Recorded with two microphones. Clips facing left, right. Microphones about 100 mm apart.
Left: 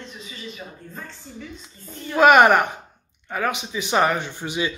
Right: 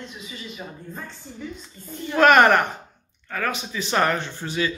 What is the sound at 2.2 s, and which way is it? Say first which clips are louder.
Speech: left 1 dB; 15° left (ahead or behind).